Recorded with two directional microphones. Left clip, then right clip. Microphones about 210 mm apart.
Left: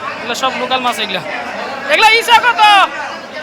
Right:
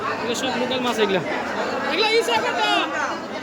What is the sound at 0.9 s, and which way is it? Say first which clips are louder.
Speech: left 3 dB; 15° right (ahead or behind).